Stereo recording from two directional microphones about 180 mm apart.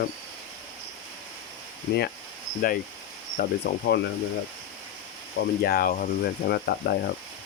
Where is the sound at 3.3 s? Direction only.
65° left (ahead or behind).